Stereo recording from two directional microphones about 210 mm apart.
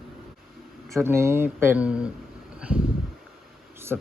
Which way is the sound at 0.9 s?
15° right (ahead or behind).